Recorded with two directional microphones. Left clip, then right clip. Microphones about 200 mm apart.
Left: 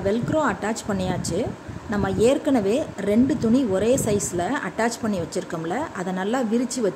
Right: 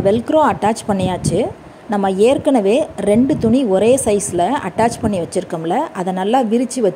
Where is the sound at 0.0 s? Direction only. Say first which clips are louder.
Right 9 dB; 25° right (ahead or behind).